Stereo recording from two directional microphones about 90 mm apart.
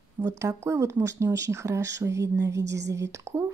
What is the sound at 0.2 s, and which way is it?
A woman's voice, 35° right (ahead or behind).